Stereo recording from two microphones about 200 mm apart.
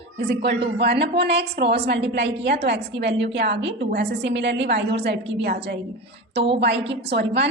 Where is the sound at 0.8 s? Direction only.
55° right (ahead or behind).